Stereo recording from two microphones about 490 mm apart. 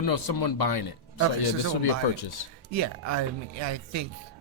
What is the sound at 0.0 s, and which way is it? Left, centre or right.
Speech, left.